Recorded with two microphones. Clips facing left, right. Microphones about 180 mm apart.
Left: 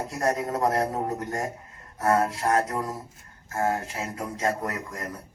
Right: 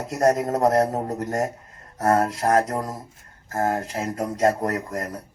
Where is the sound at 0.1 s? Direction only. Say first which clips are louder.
Right 8 dB; 40° right (ahead or behind).